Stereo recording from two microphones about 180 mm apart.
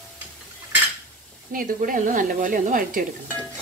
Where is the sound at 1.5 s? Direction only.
50° right (ahead or behind).